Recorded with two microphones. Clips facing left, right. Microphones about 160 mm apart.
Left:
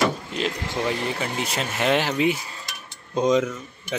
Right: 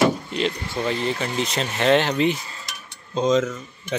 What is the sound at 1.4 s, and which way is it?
Speech, 10° left (ahead or behind).